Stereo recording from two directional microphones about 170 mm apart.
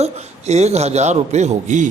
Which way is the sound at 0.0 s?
40° right (ahead or behind).